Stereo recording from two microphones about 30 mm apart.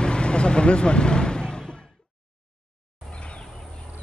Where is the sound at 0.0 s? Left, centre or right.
Left.